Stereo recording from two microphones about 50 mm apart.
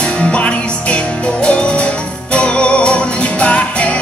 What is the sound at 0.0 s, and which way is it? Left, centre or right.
Music, left.